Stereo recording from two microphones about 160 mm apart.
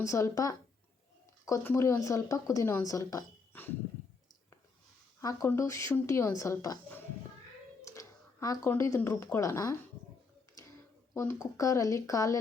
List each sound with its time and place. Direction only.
0.0 s speech: 20° left (ahead or behind)
5.2 s speech: 20° left (ahead or behind)
7.9 s a sound: 20° left (ahead or behind)
8.7 s speech: 15° left (ahead or behind)
11.1 s speech: 15° left (ahead or behind)